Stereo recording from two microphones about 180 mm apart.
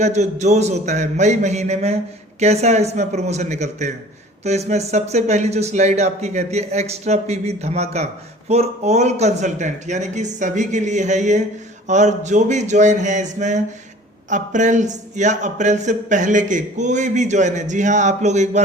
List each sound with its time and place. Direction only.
0.0 s speech: 40° right (ahead or behind)